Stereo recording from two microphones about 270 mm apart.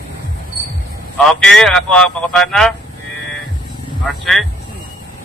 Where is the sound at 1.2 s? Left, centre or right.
Centre.